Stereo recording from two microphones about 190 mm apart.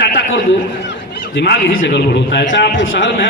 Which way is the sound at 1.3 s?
60° left (ahead or behind).